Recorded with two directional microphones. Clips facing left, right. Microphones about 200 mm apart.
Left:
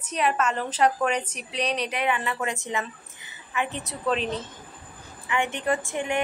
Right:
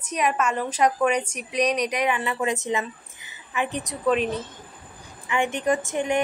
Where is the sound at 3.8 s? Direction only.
10° right (ahead or behind).